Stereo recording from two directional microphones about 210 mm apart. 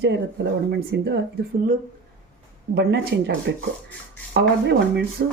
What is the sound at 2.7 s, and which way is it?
Speech, 50° right (ahead or behind).